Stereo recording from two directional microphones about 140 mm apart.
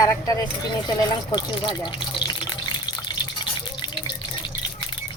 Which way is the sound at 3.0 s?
35° left (ahead or behind).